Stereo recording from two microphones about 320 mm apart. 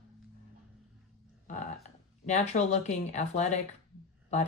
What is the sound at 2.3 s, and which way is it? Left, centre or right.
Speech, left.